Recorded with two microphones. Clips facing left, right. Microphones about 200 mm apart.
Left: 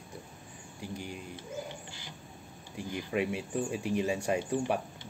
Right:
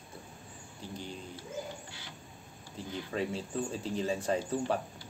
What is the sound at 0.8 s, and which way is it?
Speech, 10° left (ahead or behind).